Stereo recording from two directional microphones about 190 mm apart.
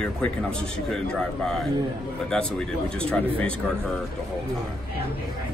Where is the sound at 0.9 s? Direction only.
5° left (ahead or behind).